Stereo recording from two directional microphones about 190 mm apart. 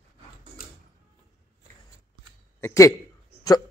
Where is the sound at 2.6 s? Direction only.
15° left (ahead or behind).